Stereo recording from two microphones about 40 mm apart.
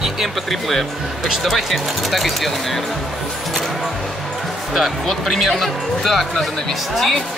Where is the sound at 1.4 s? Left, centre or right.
Centre.